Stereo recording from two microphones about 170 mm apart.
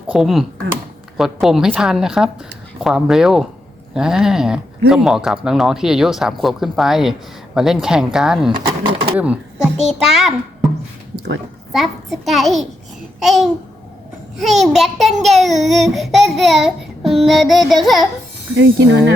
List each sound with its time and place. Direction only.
0.1 s speech: centre (ahead or behind)
8.5 s speech: 30° right (ahead or behind)
9.1 s speech: 10° right (ahead or behind)
11.7 s speech: centre (ahead or behind)
13.1 s babbling: centre (ahead or behind)
14.6 s speech: centre (ahead or behind)
18.5 s speech: 90° right